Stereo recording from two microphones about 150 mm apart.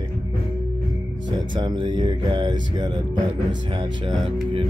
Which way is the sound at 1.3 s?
30° right (ahead or behind).